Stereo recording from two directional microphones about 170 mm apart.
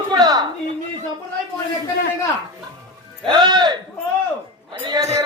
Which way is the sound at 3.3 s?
25° right (ahead or behind).